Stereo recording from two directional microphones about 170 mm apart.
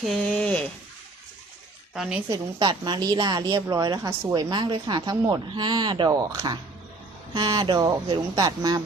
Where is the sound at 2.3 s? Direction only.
25° right (ahead or behind).